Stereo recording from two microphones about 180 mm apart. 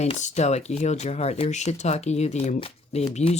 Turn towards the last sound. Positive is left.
turn(degrees=35)  # may be behind; listen again after turning